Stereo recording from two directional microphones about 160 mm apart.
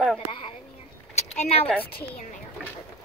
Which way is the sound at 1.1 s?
45° left (ahead or behind).